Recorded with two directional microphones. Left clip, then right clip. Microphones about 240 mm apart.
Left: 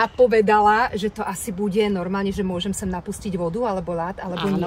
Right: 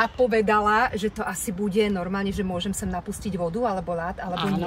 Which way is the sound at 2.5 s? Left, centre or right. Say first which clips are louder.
Left 2 dB; left.